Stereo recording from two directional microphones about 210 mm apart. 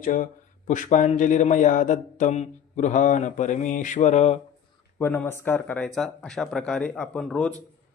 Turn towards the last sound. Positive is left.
turn(degrees=5)  # may be behind; listen again after turning